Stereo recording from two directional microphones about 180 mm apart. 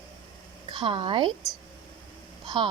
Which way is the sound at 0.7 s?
25° right (ahead or behind).